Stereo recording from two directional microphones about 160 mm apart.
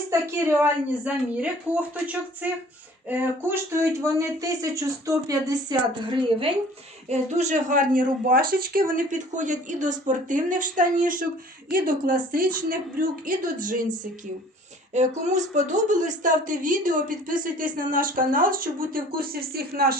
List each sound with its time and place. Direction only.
0.1 s speech: 15° right (ahead or behind)
7.1 s a woman's voice: 45° right (ahead or behind)
14.9 s a woman's voice: 50° right (ahead or behind); by 20.0 s 70° right (ahead or behind)